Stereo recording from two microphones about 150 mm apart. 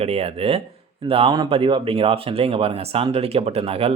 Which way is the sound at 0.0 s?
40° right (ahead or behind).